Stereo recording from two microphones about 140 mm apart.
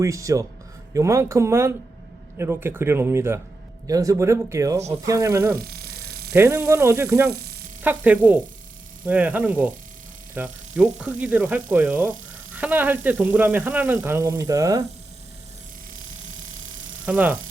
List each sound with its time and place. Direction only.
0.0 s speech: 25° right (ahead or behind)
17.1 s speech: 10° right (ahead or behind)